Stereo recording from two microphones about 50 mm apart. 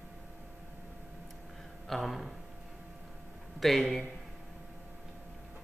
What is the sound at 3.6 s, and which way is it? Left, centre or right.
Speech, centre.